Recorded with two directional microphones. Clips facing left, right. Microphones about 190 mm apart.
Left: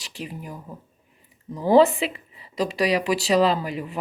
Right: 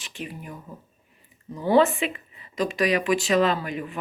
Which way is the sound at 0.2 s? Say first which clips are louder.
Left 1 dB; 30° left (ahead or behind).